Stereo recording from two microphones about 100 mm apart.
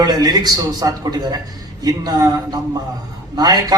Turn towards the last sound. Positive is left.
turn(degrees=-40)  # may be behind; listen again after turning